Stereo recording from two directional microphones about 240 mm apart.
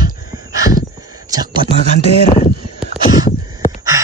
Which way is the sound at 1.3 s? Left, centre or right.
Centre.